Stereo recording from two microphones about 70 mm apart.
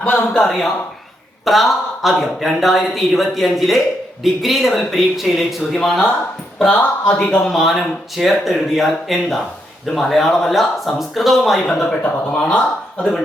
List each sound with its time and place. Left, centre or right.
0.0 s speech: centre
0.3 s speech: centre
6.7 s speech: left
7.3 s speech: centre
13.0 s speech: centre